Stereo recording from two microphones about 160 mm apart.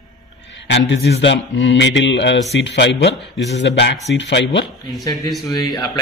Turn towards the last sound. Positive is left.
turn(degrees=25)  # may be behind; listen again after turning